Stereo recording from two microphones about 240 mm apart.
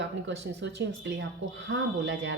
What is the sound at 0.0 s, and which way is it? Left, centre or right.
Speech, right.